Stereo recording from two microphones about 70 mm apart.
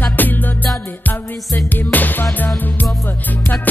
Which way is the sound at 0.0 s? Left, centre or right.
Left.